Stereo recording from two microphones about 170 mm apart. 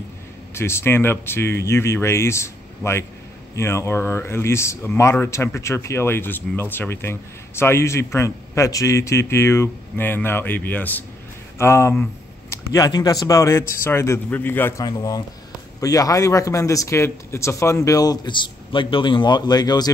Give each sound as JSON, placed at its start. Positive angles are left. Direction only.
{"t": 0.6, "sound": "speech", "side_deg": 15}
{"t": 14.9, "sound": "a man's voice", "side_deg": 20}